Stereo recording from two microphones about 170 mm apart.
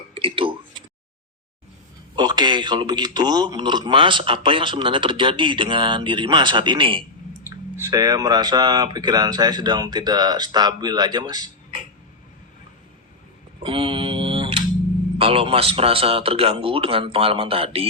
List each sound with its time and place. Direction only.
0.1 s tick-tock: 30° right (ahead or behind)
2.1 s a man's voice: 25° right (ahead or behind)
7.4 s speech: 15° right (ahead or behind)
13.6 s a sound: 30° right (ahead or behind)
15.2 s speech: 35° right (ahead or behind)